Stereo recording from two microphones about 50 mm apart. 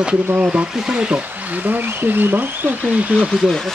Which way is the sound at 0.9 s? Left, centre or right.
Right.